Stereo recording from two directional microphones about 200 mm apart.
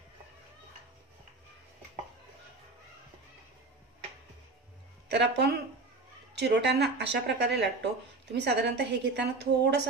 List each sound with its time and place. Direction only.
5.0 s speech: 55° right (ahead or behind)